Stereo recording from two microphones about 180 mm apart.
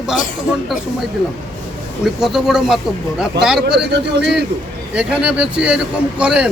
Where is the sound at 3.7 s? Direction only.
70° right (ahead or behind).